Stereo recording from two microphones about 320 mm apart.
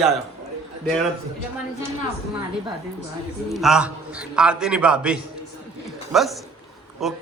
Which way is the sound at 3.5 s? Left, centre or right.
Centre.